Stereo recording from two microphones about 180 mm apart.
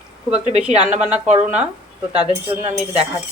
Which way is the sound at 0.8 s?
5° right (ahead or behind).